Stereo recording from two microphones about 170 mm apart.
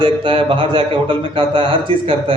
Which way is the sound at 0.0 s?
30° right (ahead or behind).